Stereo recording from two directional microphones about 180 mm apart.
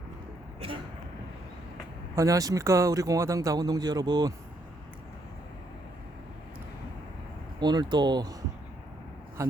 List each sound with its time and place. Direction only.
2.1 s speech: 20° right (ahead or behind)
7.6 s speech: 25° right (ahead or behind)